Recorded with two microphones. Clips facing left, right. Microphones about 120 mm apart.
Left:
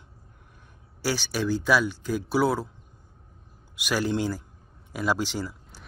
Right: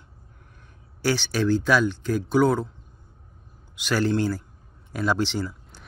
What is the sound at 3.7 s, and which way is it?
Speech, 10° left (ahead or behind).